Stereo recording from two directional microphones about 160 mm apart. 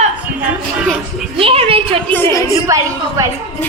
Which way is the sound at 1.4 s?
35° right (ahead or behind).